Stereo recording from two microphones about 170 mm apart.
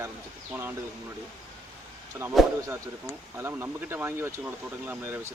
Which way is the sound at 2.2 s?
15° right (ahead or behind).